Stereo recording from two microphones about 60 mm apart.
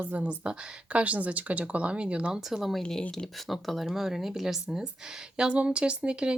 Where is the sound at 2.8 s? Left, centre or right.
Centre.